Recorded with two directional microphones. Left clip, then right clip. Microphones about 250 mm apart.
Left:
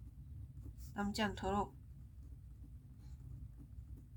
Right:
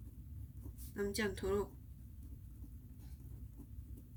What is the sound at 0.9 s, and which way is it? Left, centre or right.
Speech, left.